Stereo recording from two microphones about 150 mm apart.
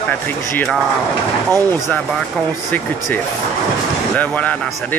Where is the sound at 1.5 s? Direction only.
25° right (ahead or behind).